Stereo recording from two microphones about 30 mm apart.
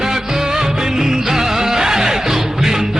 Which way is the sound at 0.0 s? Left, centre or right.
Centre.